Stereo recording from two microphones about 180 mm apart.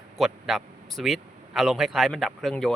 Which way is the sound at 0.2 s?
Centre (ahead or behind).